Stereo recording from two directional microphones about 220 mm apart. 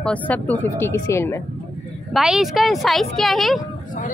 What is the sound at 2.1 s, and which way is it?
A woman's voice, centre (ahead or behind).